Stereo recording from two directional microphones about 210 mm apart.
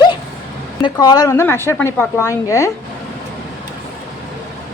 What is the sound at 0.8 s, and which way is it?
Speech, 20° left (ahead or behind).